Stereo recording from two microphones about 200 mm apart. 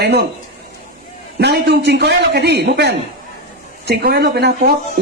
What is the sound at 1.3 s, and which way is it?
A man's voice, 55° right (ahead or behind).